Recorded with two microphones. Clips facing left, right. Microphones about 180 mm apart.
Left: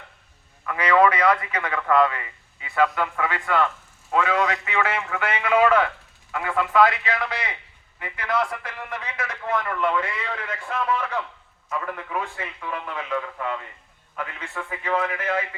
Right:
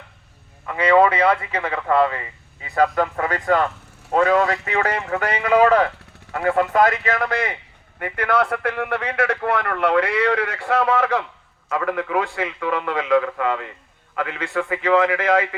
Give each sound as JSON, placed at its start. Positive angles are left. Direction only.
{"t": 0.6, "sound": "a man's voice", "side_deg": -25}